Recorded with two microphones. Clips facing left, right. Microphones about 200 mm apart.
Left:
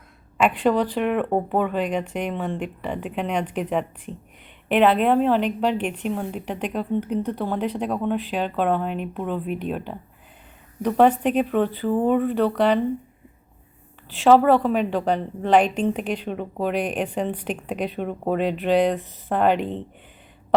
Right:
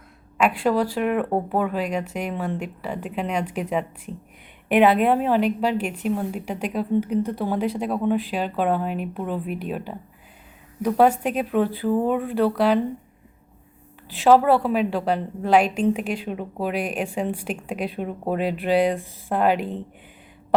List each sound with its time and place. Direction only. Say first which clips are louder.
0.4 s a woman's voice: left 1 dB; 5° right (ahead or behind)
14.3 s a woman's voice: left 1 dB; 10° right (ahead or behind)